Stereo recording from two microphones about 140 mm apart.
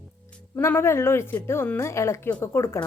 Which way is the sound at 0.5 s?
15° left (ahead or behind).